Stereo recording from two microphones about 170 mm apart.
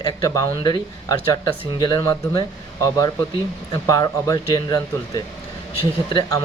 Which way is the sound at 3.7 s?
20° left (ahead or behind).